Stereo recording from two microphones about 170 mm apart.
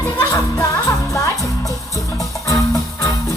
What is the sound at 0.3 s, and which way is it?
Music, 20° left (ahead or behind).